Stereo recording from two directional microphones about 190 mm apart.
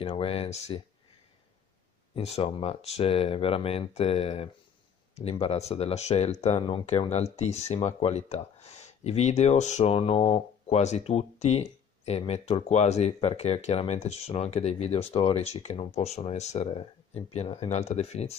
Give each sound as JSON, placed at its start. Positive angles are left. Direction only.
{"t": 0.0, "sound": "speech", "side_deg": 30}
{"t": 2.1, "sound": "speech", "side_deg": 30}